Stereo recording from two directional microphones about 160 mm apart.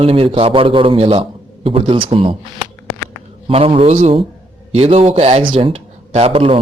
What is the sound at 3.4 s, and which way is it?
A man's voice, 35° right (ahead or behind).